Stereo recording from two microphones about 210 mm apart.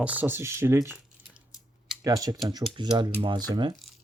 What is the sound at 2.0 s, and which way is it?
Speech, 15° right (ahead or behind).